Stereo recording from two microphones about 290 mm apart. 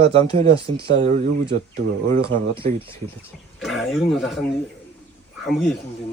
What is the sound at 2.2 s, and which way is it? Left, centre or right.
Speech, centre.